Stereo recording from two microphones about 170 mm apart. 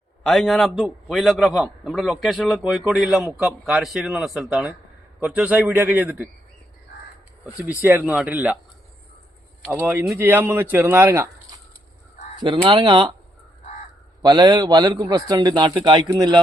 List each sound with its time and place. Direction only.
0.2 s a man's voice: centre (ahead or behind)
7.8 s speech: 10° right (ahead or behind)
9.7 s speech: 15° right (ahead or behind)
12.4 s a man's voice: 25° right (ahead or behind)
14.2 s a man's voice: 25° right (ahead or behind)